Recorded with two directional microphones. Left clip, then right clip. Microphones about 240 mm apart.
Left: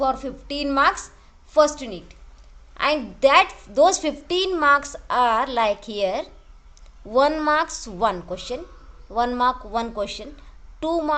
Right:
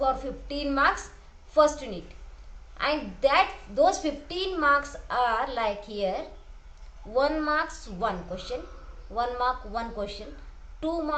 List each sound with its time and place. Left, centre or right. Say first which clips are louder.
0.0 s a woman's voice: left 4 dB; left